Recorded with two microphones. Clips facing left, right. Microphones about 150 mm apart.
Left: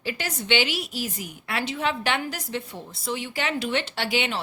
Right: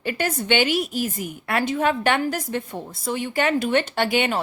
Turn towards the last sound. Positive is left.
turn(degrees=-50)  # may be behind; listen again after turning